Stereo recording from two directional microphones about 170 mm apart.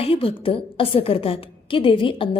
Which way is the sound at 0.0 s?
35° left (ahead or behind).